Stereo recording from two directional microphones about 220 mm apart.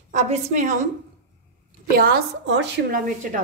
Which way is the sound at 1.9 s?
45° right (ahead or behind).